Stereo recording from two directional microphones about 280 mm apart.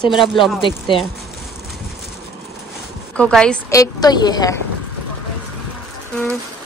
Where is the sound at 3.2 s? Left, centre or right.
Centre.